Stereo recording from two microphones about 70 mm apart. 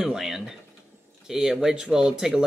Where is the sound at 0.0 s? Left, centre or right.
Centre.